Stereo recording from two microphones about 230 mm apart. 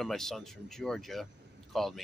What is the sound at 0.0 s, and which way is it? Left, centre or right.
Speech, centre.